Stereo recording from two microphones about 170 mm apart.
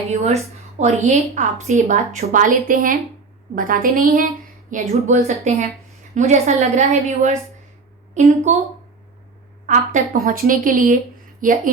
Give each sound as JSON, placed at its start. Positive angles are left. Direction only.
{"t": 0.1, "sound": "a woman's voice", "side_deg": -40}
{"t": 4.7, "sound": "a woman's voice", "side_deg": -40}
{"t": 9.6, "sound": "a woman's voice", "side_deg": -50}